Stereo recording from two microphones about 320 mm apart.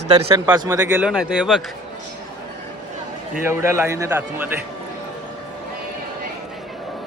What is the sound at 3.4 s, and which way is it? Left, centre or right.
A man's voice, centre.